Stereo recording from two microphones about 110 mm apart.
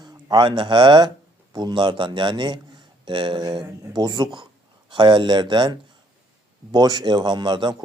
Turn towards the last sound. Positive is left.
turn(degrees=-45)  # may be behind; listen again after turning